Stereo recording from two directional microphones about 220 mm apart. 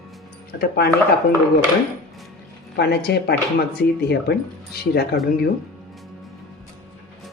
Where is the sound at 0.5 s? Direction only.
45° left (ahead or behind).